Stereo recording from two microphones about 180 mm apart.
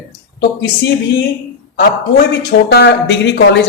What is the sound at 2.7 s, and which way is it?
Speech, 70° left (ahead or behind).